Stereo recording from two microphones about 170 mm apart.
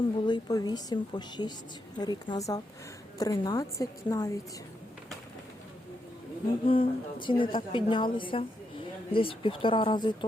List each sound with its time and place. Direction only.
0.2 s a woman's voice: 25° left (ahead or behind)
6.7 s a woman's voice: 30° left (ahead or behind)